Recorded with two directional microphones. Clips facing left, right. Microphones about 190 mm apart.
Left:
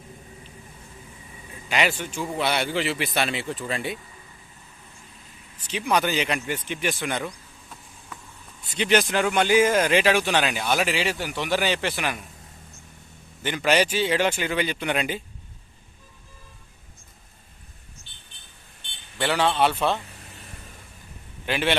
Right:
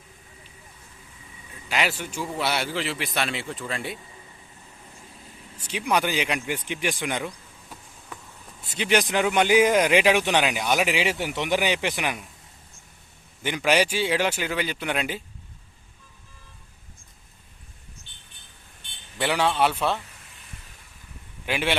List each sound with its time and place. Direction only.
1.7 s speech: centre (ahead or behind)
5.5 s speech: 10° right (ahead or behind)
8.7 s speech: 10° right (ahead or behind)
13.4 s speech: 10° right (ahead or behind)
19.2 s speech: 10° right (ahead or behind)
21.4 s speech: 10° right (ahead or behind)